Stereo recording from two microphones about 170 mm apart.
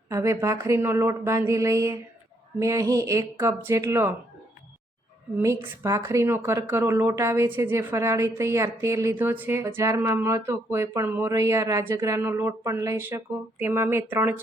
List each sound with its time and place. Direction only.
0.1 s speech: 15° right (ahead or behind)
5.4 s speech: 15° right (ahead or behind)